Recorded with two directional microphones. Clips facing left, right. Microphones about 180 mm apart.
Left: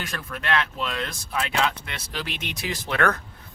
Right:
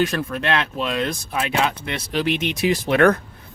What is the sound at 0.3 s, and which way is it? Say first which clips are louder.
Speech: right 4 dB; 25° right (ahead or behind).